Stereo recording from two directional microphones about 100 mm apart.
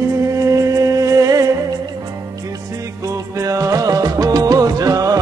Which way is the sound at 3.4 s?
35° right (ahead or behind).